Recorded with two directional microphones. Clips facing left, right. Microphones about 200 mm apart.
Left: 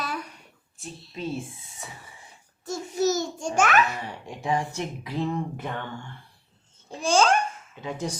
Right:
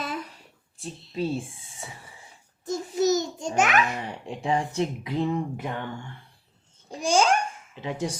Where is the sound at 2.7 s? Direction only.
20° right (ahead or behind).